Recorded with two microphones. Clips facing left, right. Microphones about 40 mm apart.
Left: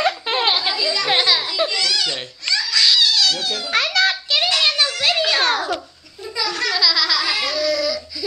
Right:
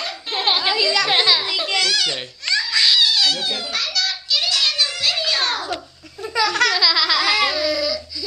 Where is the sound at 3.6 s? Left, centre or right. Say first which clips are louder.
Left 6 dB; left.